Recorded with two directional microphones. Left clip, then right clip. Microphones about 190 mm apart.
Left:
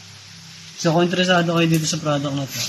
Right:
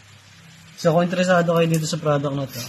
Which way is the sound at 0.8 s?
50° right (ahead or behind).